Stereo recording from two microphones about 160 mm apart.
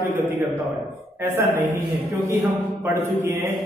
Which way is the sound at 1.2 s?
15° right (ahead or behind).